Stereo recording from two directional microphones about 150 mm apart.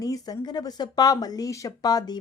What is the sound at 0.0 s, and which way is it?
Speech, 25° left (ahead or behind).